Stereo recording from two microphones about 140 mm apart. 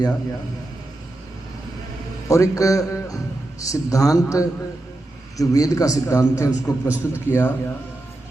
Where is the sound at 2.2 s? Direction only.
25° left (ahead or behind).